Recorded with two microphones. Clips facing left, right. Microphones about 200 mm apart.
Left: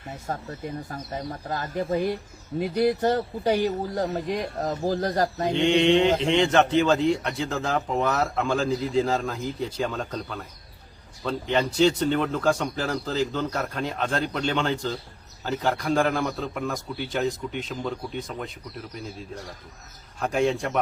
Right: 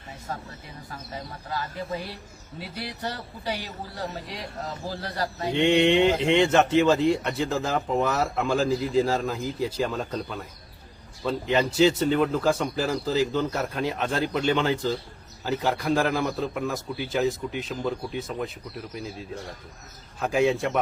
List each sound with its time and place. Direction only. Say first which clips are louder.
0.3 s speech: left 6 dB; 45° left (ahead or behind)
5.5 s speech: even; 5° right (ahead or behind)
20.1 s speech: right 1 dB; centre (ahead or behind)